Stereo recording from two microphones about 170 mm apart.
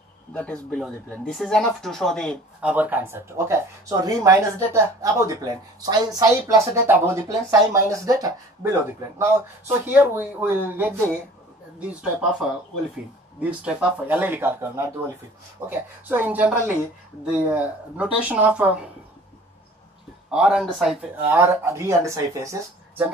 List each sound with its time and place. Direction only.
0.3 s speech: 5° left (ahead or behind)
2.6 s speech: 10° right (ahead or behind)
15.7 s speech: 10° right (ahead or behind)
20.2 s speech: 5° right (ahead or behind)
21.3 s speech: 15° right (ahead or behind)